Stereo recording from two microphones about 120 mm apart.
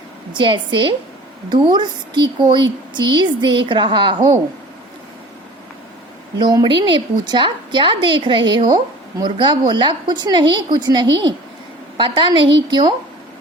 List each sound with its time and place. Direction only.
0.3 s a woman's voice: 40° right (ahead or behind)
6.4 s speech: 40° right (ahead or behind)